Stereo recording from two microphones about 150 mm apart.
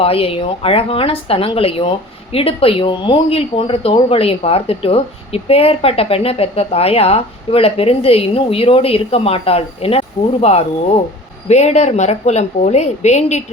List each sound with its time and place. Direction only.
0.0 s a woman's voice: 40° left (ahead or behind)